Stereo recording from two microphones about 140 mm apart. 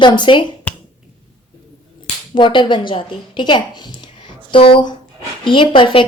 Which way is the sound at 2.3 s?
35° left (ahead or behind).